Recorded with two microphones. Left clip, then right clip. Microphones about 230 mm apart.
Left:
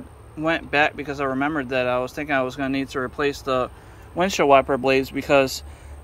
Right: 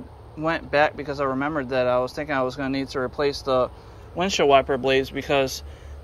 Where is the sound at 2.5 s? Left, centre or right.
Left.